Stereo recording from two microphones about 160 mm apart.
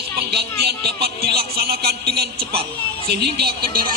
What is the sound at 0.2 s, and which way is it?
Speech, 80° right.